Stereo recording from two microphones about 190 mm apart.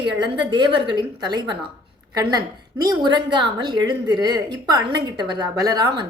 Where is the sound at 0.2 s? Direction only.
25° right (ahead or behind).